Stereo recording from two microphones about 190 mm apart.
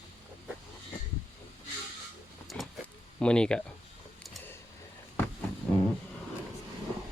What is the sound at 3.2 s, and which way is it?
Speech, 5° left (ahead or behind).